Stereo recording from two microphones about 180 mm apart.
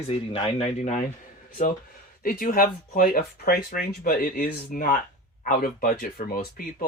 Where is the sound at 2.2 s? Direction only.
55° left (ahead or behind).